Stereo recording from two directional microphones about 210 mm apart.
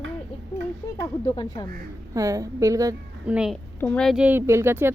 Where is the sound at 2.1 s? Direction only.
15° right (ahead or behind).